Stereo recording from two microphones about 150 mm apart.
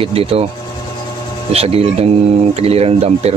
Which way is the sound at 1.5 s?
40° right (ahead or behind).